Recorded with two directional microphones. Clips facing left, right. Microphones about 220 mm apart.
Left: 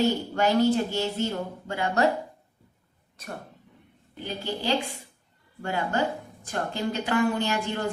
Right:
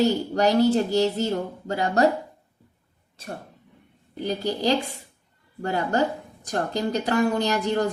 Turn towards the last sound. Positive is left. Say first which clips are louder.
# right 5 dB
turn(degrees=-40)  # may be behind; listen again after turning